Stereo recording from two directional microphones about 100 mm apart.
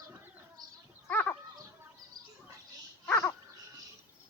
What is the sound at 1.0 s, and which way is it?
Goat, 20° left (ahead or behind).